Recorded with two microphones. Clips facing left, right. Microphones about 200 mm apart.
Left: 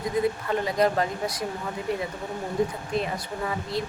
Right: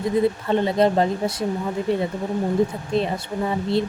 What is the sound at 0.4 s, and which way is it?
Speech, 25° right (ahead or behind).